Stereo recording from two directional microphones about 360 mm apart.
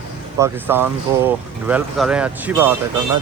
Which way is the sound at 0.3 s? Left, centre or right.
Centre.